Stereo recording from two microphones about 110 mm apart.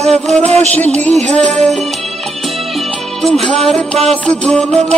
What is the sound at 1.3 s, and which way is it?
Music, 5° left (ahead or behind).